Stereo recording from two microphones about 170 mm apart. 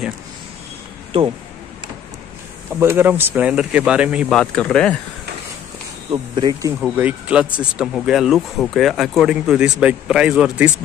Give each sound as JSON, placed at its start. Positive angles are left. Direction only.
{"t": 2.7, "sound": "speech", "side_deg": -15}
{"t": 4.4, "sound": "speech", "side_deg": 5}
{"t": 6.1, "sound": "speech", "side_deg": -25}
{"t": 7.0, "sound": "speech", "side_deg": -10}